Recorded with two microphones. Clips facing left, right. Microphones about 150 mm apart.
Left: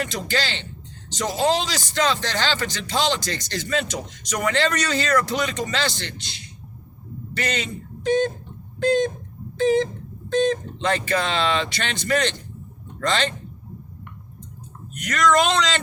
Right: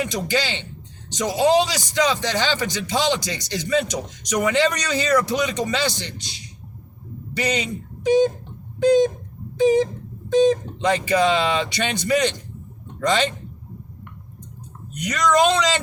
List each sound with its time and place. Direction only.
0.0 s speech: 15° right (ahead or behind)
15.0 s speech: 15° right (ahead or behind)